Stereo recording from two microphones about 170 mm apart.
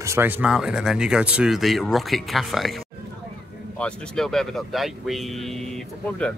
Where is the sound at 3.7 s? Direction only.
5° left (ahead or behind).